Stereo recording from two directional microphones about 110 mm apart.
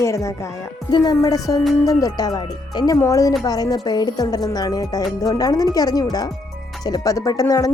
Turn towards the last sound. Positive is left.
turn(degrees=30)  # may be behind; listen again after turning